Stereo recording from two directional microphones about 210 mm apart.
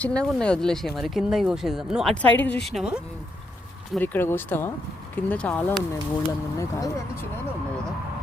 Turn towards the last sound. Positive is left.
turn(degrees=15)  # may be behind; listen again after turning